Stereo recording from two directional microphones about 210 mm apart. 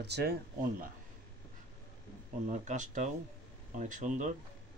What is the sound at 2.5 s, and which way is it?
Speech, 35° right (ahead or behind).